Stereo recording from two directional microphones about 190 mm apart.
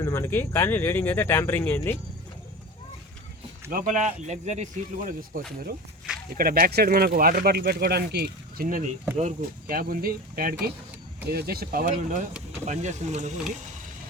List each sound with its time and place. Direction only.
0.0 s speech: 15° left (ahead or behind)
3.7 s speech: 45° right (ahead or behind)
8.6 s speech: 45° right (ahead or behind)